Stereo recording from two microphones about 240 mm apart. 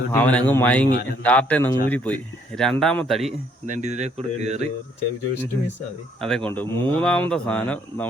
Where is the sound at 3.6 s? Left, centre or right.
Right.